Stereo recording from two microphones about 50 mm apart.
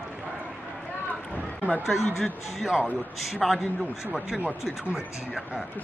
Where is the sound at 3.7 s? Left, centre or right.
Left.